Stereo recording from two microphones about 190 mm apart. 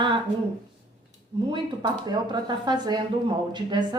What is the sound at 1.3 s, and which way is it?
A woman's voice, 25° right (ahead or behind).